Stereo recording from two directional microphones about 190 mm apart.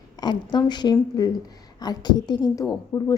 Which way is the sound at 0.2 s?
20° left (ahead or behind).